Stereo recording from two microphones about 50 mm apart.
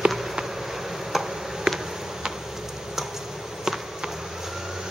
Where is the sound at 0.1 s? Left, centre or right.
Centre.